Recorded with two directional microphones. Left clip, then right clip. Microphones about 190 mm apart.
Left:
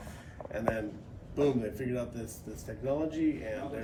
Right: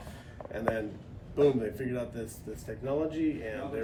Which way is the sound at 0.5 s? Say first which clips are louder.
Right 1 dB; 15° left (ahead or behind).